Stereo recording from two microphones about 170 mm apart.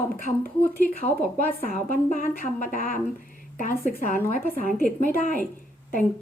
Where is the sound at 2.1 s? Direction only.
55° left (ahead or behind).